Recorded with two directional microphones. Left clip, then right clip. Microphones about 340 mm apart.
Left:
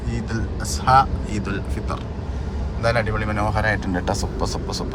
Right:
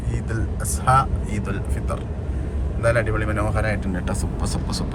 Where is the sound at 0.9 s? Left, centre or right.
Centre.